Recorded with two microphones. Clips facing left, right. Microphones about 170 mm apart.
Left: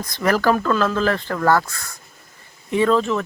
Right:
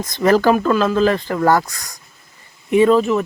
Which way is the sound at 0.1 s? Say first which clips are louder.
Right 5 dB; 20° right (ahead or behind).